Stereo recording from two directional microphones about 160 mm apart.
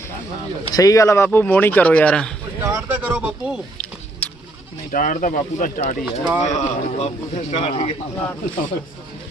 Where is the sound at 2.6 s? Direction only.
10° right (ahead or behind).